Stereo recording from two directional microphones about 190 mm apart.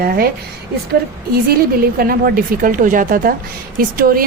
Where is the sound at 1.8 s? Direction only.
50° right (ahead or behind).